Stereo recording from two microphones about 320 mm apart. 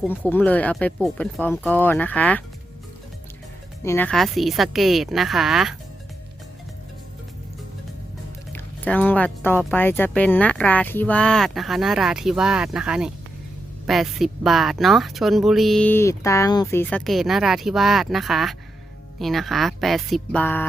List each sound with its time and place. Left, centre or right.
0.0 s speech: centre
3.8 s speech: centre
8.5 s speech: centre